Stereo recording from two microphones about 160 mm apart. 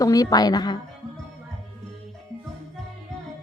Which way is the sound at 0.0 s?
20° left (ahead or behind).